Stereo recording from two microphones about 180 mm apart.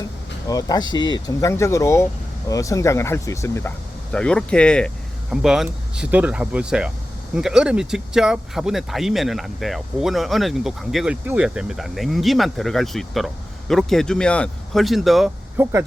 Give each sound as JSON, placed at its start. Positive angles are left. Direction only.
{"t": 0.4, "sound": "speech", "side_deg": 20}
{"t": 15.6, "sound": "speech", "side_deg": -15}